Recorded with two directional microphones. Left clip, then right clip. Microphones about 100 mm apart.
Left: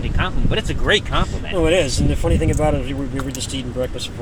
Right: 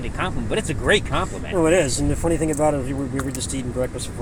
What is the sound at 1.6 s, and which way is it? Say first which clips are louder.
Speech: left 1 dB; 15° left (ahead or behind).